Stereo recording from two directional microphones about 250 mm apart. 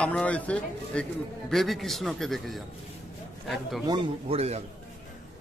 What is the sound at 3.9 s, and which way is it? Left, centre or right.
Speech, right.